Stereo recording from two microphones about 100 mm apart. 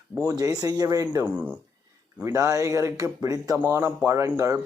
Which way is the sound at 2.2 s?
30° right (ahead or behind).